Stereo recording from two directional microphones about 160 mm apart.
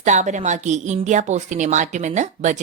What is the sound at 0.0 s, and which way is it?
A woman's voice, 50° right (ahead or behind).